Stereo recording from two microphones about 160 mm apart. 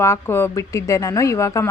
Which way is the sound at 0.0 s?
15° left (ahead or behind).